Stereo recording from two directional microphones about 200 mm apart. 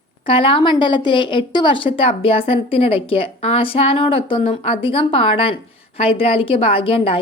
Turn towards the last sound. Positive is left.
turn(degrees=30)  # may be behind; listen again after turning